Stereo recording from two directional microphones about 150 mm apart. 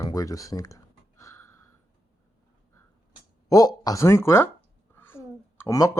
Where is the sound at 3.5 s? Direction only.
25° left (ahead or behind).